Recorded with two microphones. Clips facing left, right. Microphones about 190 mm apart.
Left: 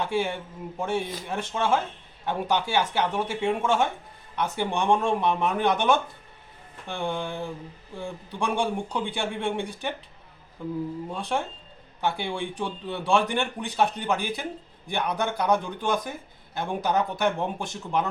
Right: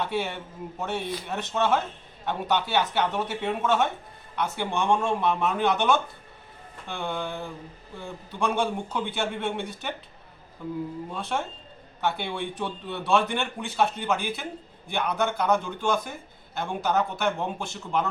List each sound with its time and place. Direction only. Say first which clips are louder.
0.0 s speech: left 2 dB; 10° left (ahead or behind)
11.1 s speech: left 1 dB; 15° left (ahead or behind)